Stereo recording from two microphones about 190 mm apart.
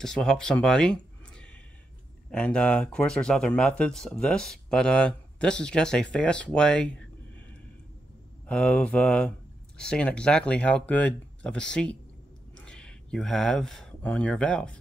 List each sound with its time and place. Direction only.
0.0 s speech: 5° left (ahead or behind)
8.5 s speech: 5° left (ahead or behind)